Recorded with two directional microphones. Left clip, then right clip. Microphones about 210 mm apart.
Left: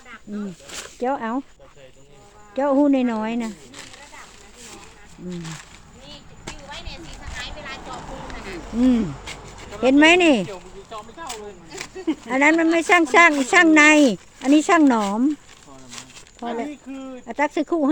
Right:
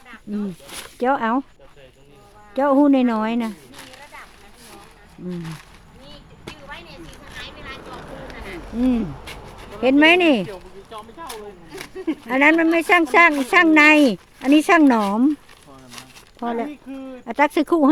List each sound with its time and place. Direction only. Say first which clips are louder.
0.7 s speech: right 4 dB; 25° right (ahead or behind)
2.6 s speech: right 2 dB; 15° right (ahead or behind)
5.3 s speech: right 1 dB; 5° right (ahead or behind)
6.4 s a sound: even; centre (ahead or behind)
8.8 s speech: left 2 dB; centre (ahead or behind)
16.4 s speech: right 3 dB; 25° right (ahead or behind)
16.9 s speech: right 1 dB; 20° left (ahead or behind)
17.2 s speech: right 4 dB; 20° right (ahead or behind)